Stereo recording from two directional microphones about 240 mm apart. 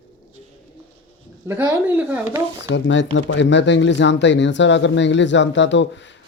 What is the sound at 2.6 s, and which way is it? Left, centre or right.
Speech, left.